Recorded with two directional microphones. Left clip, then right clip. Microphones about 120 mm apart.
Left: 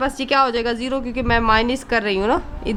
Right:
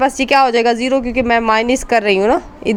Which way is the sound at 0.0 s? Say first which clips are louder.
Right 6 dB; 45° right (ahead or behind).